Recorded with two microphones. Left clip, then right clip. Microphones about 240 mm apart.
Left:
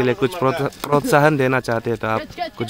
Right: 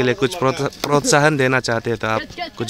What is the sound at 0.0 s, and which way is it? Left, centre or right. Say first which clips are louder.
Speech: right 1 dB; centre.